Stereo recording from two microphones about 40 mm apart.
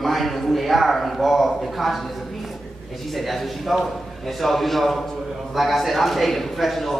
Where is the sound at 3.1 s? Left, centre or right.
Centre.